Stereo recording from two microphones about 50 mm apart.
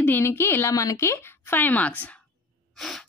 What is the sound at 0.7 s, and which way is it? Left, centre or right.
Speech, left.